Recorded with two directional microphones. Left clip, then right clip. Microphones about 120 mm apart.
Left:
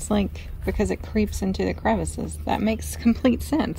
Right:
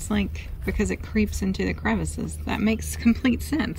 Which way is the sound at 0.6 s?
15° left (ahead or behind).